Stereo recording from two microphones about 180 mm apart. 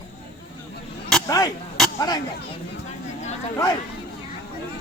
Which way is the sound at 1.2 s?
20° left (ahead or behind).